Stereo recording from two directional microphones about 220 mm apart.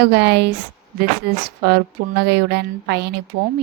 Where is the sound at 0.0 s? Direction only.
50° right (ahead or behind).